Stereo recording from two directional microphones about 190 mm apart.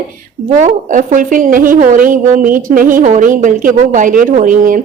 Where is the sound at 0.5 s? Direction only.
40° right (ahead or behind).